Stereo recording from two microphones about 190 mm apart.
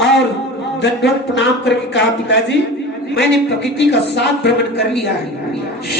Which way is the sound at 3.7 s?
60° left (ahead or behind).